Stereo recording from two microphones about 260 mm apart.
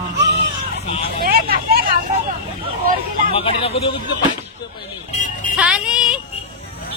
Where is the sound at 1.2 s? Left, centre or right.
Right.